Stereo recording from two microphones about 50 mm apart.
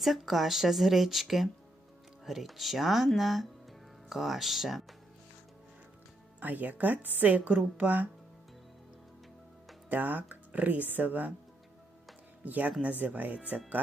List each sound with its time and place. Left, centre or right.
0.0 s speech: centre
6.4 s speech: right
9.9 s speech: right
12.5 s speech: right